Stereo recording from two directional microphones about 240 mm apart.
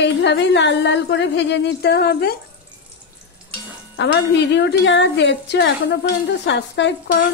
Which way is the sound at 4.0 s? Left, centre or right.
Left.